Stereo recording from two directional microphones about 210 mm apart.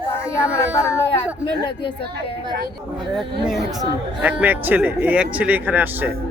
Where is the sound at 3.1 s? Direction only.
Centre (ahead or behind).